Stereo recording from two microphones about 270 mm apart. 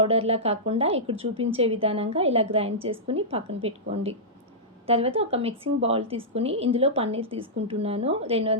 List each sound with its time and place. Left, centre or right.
0.0 s a woman's voice: right